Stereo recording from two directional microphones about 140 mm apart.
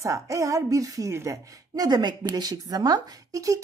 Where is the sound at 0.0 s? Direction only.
25° right (ahead or behind).